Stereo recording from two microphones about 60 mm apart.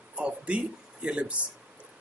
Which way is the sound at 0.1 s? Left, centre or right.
Centre.